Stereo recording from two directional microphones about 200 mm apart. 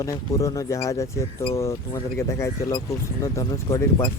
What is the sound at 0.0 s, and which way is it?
Speech, 15° left (ahead or behind).